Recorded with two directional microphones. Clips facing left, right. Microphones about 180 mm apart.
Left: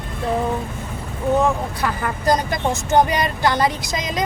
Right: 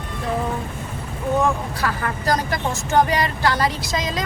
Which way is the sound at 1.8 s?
20° left (ahead or behind).